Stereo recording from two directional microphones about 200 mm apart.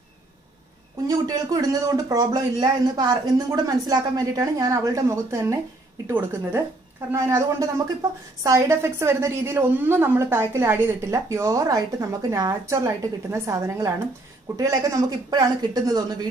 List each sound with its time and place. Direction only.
1.0 s a woman's voice: 15° right (ahead or behind)